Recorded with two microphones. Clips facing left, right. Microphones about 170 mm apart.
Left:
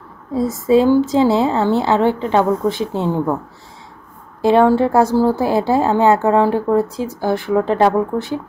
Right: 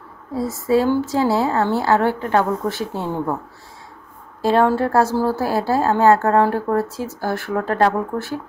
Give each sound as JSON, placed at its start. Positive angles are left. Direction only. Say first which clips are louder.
{"t": 0.3, "sound": "a woman's voice", "louder": "left 4 dB", "side_deg": 20}
{"t": 4.4, "sound": "a woman's voice", "louder": "left 4 dB", "side_deg": 15}